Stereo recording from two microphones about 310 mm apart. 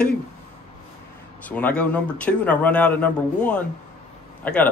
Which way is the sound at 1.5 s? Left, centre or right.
Centre.